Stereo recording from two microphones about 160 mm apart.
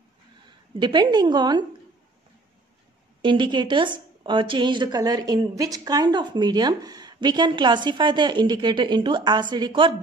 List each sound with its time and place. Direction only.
0.7 s a woman's voice: 25° right (ahead or behind)
3.2 s a woman's voice: 30° right (ahead or behind)